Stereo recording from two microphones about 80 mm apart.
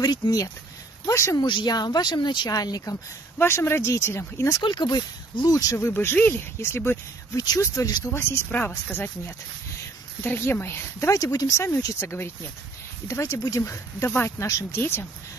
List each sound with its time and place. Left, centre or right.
0.0 s speech: left
1.0 s speech: left
1.4 s speech: left
3.3 s speech: left
4.6 s speech: left
5.5 s speech: left
6.1 s speech: left
6.6 s speech: left
7.3 s speech: left
8.1 s speech: left
13.1 s speech: left